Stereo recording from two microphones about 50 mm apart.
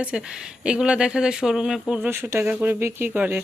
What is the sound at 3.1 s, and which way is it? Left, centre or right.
Speech, right.